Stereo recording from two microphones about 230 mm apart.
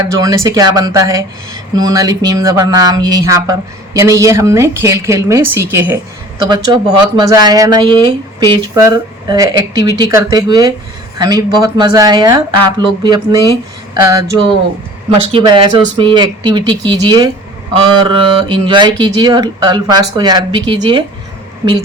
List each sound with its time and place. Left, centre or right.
0.0 s speech: centre